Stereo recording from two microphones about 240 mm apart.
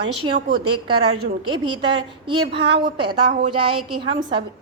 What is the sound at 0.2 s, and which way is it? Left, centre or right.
A woman's voice, right.